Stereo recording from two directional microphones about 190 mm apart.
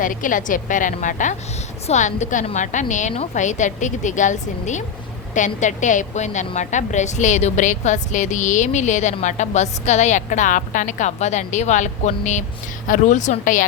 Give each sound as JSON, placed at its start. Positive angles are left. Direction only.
{"t": 0.0, "sound": "a woman's voice", "side_deg": 45}